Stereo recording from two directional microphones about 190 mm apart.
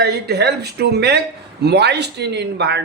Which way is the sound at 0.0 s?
60° right (ahead or behind).